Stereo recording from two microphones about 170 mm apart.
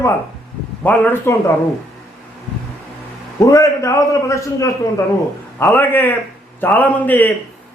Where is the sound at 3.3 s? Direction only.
20° left (ahead or behind).